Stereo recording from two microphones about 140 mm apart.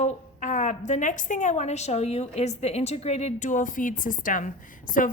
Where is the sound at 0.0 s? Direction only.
60° left (ahead or behind).